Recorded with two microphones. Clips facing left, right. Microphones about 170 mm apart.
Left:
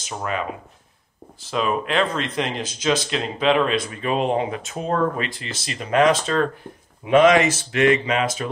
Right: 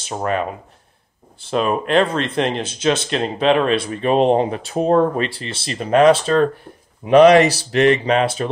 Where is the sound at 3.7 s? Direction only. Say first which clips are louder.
Right 6 dB; 30° right (ahead or behind).